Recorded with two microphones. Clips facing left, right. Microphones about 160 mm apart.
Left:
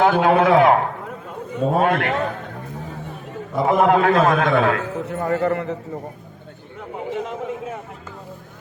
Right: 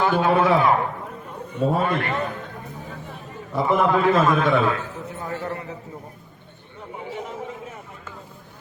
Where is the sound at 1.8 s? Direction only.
80° left.